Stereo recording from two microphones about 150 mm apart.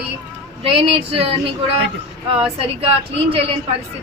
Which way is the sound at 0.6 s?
40° right (ahead or behind).